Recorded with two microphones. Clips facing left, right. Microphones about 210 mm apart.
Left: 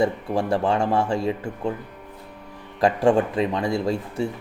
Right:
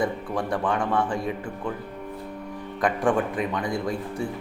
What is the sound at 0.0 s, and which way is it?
A man's voice, 25° left (ahead or behind).